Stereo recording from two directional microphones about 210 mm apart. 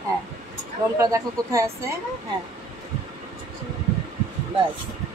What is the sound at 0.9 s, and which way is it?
Speech, 15° right (ahead or behind).